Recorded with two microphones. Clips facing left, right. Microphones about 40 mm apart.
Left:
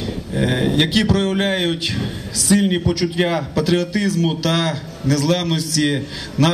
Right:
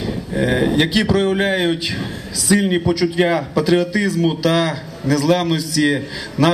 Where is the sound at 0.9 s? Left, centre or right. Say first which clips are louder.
Right 1 dB; centre.